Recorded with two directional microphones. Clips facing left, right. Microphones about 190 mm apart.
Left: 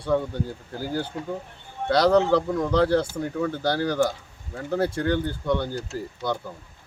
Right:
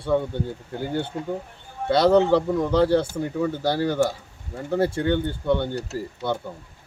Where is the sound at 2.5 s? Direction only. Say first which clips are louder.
Right 2 dB; 5° right (ahead or behind).